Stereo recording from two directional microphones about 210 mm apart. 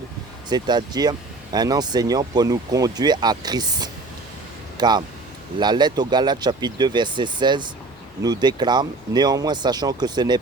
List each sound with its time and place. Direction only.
0.5 s speech: 20° right (ahead or behind)